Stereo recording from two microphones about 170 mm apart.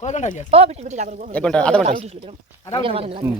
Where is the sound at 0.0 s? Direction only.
45° left (ahead or behind).